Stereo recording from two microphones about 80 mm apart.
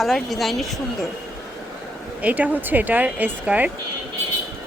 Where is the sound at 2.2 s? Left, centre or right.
Centre.